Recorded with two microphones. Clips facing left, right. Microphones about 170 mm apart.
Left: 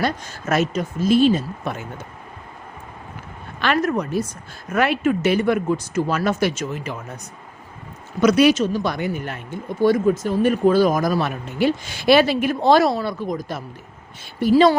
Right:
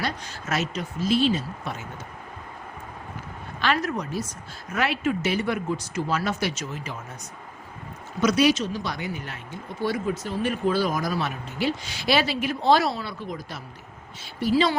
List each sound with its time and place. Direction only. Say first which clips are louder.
0.0 s speech: left 7 dB; 50° left (ahead or behind)
3.6 s speech: left 5 dB; 55° left (ahead or behind)
8.2 s speech: left 6 dB; 55° left (ahead or behind)